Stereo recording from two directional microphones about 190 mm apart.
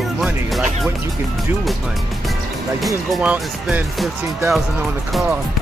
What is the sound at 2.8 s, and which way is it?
Speech, 5° right (ahead or behind).